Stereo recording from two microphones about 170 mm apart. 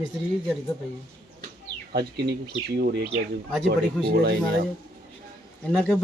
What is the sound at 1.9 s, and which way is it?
Speech, 70° right (ahead or behind).